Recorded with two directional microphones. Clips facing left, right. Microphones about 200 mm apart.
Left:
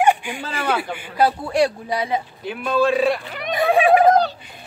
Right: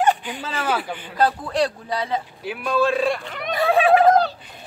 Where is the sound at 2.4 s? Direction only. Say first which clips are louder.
Left 1 dB; centre (ahead or behind).